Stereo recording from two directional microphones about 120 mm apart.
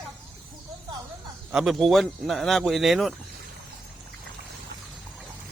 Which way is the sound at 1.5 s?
Centre (ahead or behind).